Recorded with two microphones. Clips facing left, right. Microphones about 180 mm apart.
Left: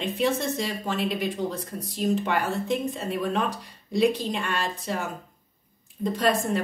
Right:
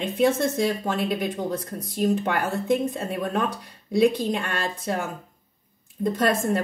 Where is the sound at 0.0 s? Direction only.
55° right (ahead or behind).